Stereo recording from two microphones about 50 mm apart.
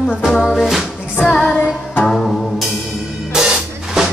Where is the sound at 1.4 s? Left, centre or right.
Left.